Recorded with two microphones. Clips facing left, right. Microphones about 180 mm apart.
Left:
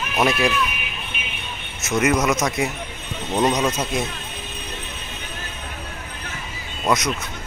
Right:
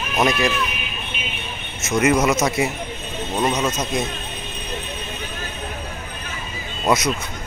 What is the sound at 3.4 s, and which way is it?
Speech, 15° left (ahead or behind).